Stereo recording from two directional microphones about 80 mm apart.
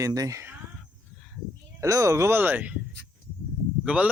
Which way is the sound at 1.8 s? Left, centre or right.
Right.